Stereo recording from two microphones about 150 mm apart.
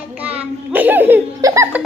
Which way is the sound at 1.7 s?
10° right (ahead or behind).